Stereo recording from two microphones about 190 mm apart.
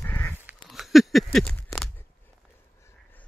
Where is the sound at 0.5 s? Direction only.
Centre (ahead or behind).